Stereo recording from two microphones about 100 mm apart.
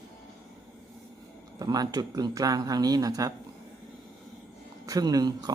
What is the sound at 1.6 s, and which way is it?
Speech, 40° right (ahead or behind).